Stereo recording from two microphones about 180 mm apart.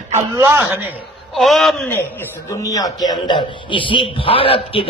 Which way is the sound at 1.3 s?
Centre (ahead or behind).